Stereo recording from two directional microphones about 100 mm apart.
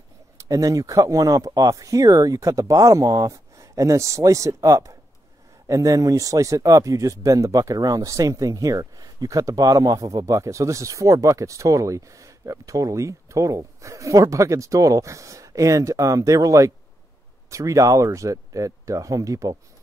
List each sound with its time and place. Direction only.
0.4 s speech: 35° right (ahead or behind)